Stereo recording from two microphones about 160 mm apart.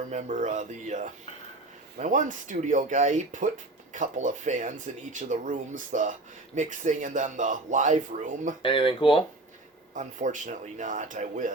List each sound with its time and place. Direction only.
0.1 s speech: 50° right (ahead or behind)
8.6 s speech: 30° left (ahead or behind)
9.9 s speech: 55° right (ahead or behind)